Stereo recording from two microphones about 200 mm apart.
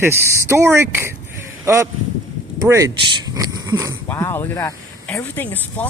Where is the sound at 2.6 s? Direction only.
15° right (ahead or behind).